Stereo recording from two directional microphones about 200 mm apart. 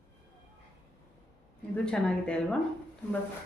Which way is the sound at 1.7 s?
5° left (ahead or behind).